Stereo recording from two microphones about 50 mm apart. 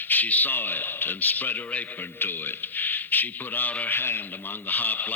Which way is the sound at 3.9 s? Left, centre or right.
Left.